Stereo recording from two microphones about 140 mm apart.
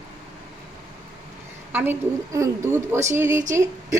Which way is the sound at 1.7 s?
15° right (ahead or behind).